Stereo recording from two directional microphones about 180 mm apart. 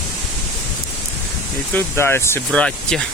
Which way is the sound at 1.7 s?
10° left (ahead or behind).